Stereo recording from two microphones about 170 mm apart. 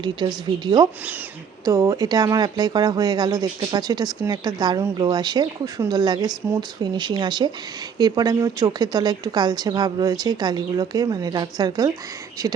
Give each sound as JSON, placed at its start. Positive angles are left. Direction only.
{"t": 0.0, "sound": "speech", "side_deg": -25}